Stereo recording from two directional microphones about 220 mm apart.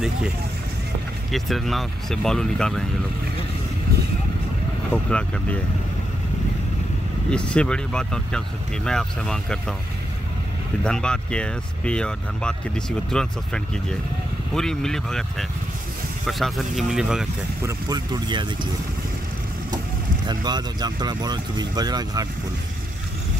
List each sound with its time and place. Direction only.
1.3 s speech: centre (ahead or behind)
4.9 s speech: 5° left (ahead or behind)
7.2 s speech: 5° left (ahead or behind)
10.8 s speech: 5° left (ahead or behind)
17.6 s speech: 15° right (ahead or behind)
20.2 s speech: 20° right (ahead or behind)